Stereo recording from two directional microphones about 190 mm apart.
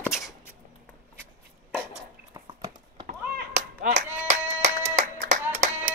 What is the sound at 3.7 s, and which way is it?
Clapping, 50° right (ahead or behind).